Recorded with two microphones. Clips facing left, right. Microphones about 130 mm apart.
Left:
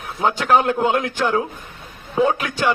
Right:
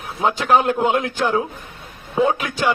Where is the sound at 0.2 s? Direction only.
5° right (ahead or behind).